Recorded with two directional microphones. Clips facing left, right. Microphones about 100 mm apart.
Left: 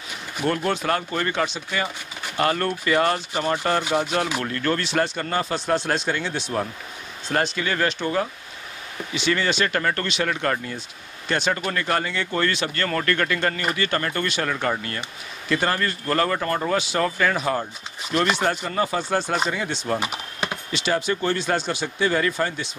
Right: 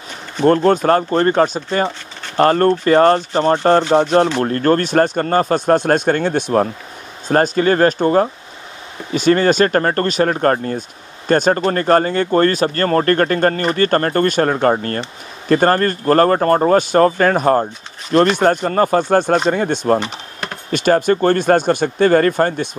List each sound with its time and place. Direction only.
0.4 s rub: 30° right (ahead or behind)
0.7 s speech: 40° right (ahead or behind)
2.8 s rub: 40° right (ahead or behind)
4.4 s speech: 40° right (ahead or behind)
20.0 s typing: 5° left (ahead or behind)
20.7 s speech: 50° right (ahead or behind)